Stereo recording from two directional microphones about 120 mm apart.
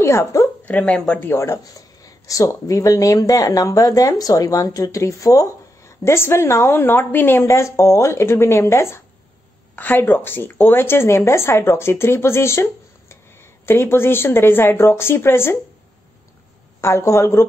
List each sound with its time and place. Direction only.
0.0 s a woman's voice: 25° left (ahead or behind)
0.7 s speech: 10° left (ahead or behind)
16.8 s speech: 25° left (ahead or behind)